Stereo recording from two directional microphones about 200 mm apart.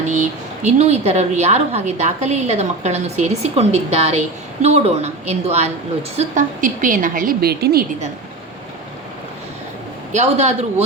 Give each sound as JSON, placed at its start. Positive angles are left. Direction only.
{"t": 0.1, "sound": "a woman's voice", "side_deg": -35}
{"t": 10.1, "sound": "a woman's voice", "side_deg": -35}